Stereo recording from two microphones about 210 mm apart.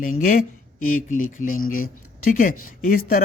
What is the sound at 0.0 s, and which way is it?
Speech, 40° left (ahead or behind).